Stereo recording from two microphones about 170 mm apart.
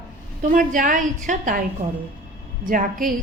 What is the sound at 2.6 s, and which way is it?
Speech, 55° right (ahead or behind).